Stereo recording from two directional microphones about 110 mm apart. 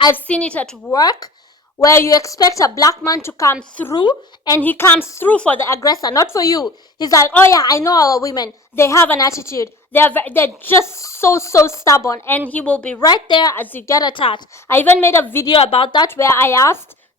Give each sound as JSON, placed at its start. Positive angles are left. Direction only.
{"t": 0.1, "sound": "a woman's voice", "side_deg": 10}
{"t": 0.9, "sound": "a woman's voice", "side_deg": 35}
{"t": 3.6, "sound": "a woman's voice", "side_deg": 15}
{"t": 3.9, "sound": "speech", "side_deg": 40}
{"t": 4.6, "sound": "a woman's voice", "side_deg": 20}
{"t": 5.3, "sound": "a woman's voice", "side_deg": 15}
{"t": 5.6, "sound": "a woman's voice", "side_deg": 30}
{"t": 12.5, "sound": "a woman's voice", "side_deg": 15}
{"t": 13.0, "sound": "speech", "side_deg": 40}
{"t": 13.6, "sound": "a woman's voice", "side_deg": 20}
{"t": 13.9, "sound": "a woman's voice", "side_deg": 40}
{"t": 14.7, "sound": "a woman's voice", "side_deg": 15}
{"t": 15.5, "sound": "speech", "side_deg": 60}
{"t": 16.0, "sound": "a woman's voice", "side_deg": 25}